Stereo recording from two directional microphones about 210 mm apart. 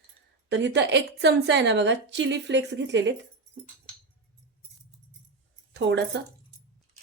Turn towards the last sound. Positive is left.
turn(degrees=-55)  # may be behind; listen again after turning